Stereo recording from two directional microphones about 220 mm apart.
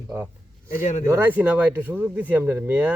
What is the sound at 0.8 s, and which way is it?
Speech, 30° left (ahead or behind).